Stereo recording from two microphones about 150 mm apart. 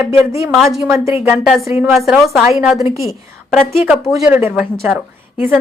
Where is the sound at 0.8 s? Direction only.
20° right (ahead or behind).